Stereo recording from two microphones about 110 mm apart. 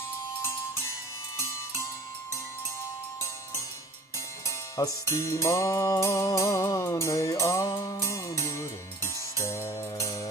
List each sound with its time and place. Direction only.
4.4 s music: 30° left (ahead or behind)